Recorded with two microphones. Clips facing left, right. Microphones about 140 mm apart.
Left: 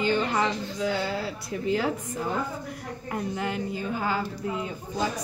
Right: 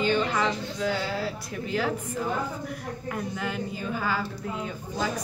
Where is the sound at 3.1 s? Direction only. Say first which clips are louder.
Left 2 dB; 25° left (ahead or behind).